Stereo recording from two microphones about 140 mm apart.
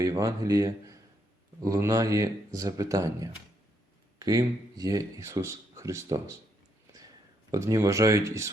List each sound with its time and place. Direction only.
0.0 s speech: 25° right (ahead or behind)
7.5 s speech: 20° right (ahead or behind)